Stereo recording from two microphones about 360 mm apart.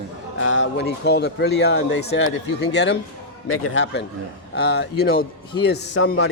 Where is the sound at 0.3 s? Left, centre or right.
Left.